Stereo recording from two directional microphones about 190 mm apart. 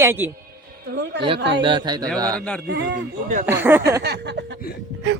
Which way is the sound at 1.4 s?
65° right (ahead or behind).